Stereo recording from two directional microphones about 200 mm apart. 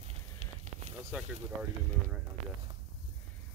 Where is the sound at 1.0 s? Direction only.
10° right (ahead or behind).